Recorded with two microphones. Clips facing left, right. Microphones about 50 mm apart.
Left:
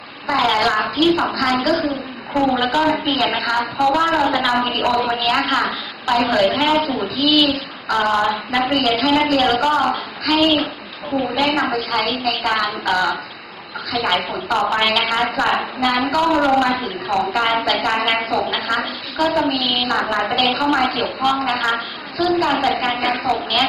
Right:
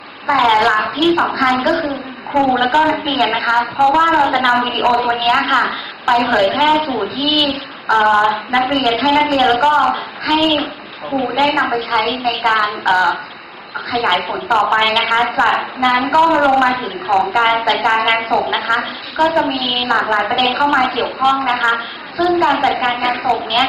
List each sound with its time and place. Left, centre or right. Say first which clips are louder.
0.3 s a woman's voice: right 5 dB; centre
14.6 s a woman's voice: right 3 dB; right